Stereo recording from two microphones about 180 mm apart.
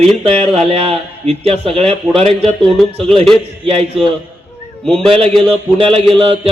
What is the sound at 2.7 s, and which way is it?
Speech, 5° left (ahead or behind).